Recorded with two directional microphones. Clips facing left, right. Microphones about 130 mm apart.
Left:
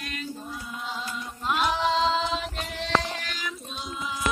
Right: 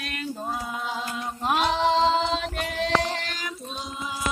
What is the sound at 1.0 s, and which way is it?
Mantra, 60° right (ahead or behind).